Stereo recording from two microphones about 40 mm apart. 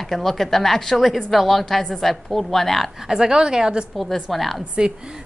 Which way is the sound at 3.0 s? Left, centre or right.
Centre.